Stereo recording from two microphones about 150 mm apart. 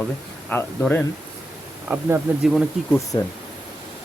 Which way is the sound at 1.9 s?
10° right (ahead or behind).